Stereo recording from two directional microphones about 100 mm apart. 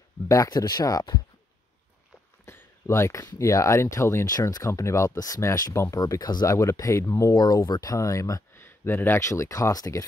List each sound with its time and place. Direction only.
0.3 s speech: 35° left (ahead or behind)
2.4 s speech: 25° left (ahead or behind)
4.4 s speech: 35° left (ahead or behind)
8.5 s speech: 25° left (ahead or behind)